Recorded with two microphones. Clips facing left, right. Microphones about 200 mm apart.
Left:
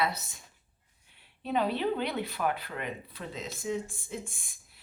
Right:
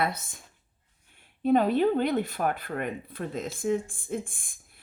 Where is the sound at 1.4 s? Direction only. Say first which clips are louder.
Right 7 dB; 50° right (ahead or behind).